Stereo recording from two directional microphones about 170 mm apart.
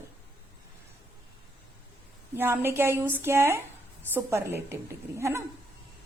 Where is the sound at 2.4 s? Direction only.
15° right (ahead or behind).